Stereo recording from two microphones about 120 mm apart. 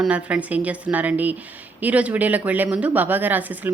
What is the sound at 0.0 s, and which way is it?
Speech, 10° right (ahead or behind).